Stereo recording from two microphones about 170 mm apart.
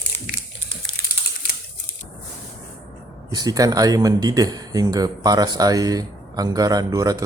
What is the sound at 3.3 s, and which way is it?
Speech, 20° right (ahead or behind).